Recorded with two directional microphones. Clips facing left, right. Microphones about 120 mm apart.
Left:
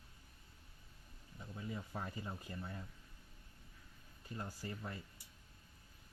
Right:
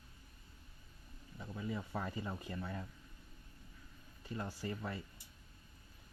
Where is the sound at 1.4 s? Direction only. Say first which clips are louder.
Right 4 dB; 90° right.